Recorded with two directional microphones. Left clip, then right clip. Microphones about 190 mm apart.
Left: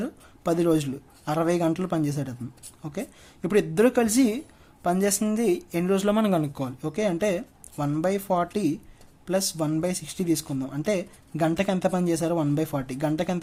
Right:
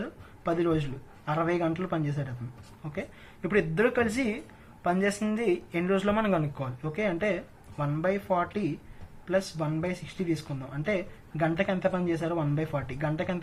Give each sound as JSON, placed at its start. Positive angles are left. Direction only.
{"t": 0.0, "sound": "a woman's voice", "side_deg": 50}